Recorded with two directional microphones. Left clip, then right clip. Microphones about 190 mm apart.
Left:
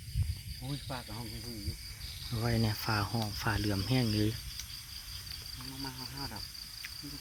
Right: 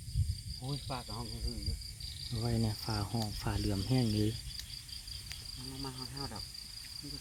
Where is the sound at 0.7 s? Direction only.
15° right (ahead or behind).